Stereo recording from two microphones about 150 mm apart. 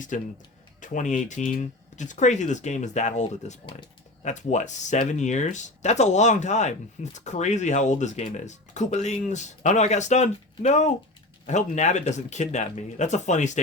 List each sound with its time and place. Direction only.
0.1 s speech: 55° left (ahead or behind)